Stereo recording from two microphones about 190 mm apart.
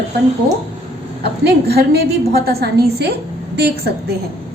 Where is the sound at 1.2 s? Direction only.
60° right (ahead or behind).